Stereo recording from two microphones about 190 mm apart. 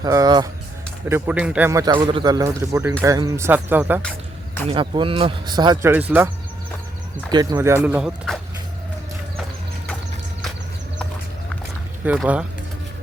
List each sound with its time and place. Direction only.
0.0 s a man's voice: 20° right (ahead or behind)
4.7 s speech: 25° right (ahead or behind)
5.9 s a man's voice: 10° right (ahead or behind)
7.5 s a man's voice: 15° right (ahead or behind)
12.0 s speech: 5° right (ahead or behind)